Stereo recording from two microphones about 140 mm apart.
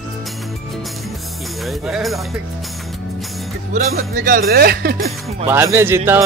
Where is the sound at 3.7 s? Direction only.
85° right.